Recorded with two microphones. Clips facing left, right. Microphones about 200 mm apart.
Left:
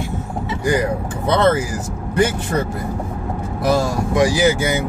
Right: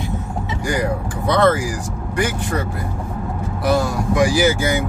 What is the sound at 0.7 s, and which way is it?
Speech, 20° left (ahead or behind).